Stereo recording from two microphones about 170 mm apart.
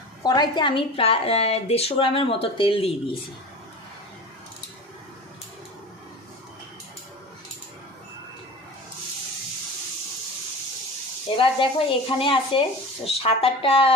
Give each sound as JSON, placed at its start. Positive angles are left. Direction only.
{"t": 0.2, "sound": "a woman's voice", "side_deg": 25}
{"t": 11.3, "sound": "a woman's voice", "side_deg": 30}